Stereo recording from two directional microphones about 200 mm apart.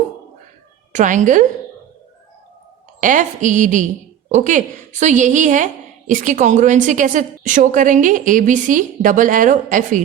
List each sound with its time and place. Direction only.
0.9 s a woman's voice: 40° right (ahead or behind)
3.0 s a woman's voice: 40° right (ahead or behind)